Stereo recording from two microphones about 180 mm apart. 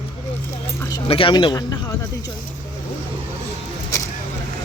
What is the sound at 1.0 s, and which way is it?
Speech, 30° left (ahead or behind).